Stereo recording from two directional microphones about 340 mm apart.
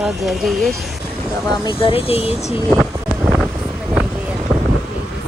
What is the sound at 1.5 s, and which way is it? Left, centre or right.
Speech, centre.